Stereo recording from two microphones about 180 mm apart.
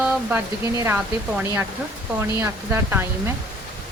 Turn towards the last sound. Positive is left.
turn(degrees=-15)  # may be behind; listen again after turning